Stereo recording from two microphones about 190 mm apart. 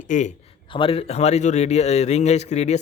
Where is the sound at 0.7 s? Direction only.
30° left (ahead or behind).